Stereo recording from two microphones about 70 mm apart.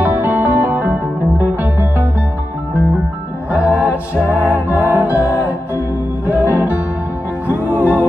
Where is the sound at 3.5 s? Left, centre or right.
Right.